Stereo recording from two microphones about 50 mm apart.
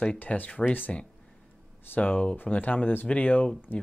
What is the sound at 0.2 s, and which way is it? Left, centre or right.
Speech, left.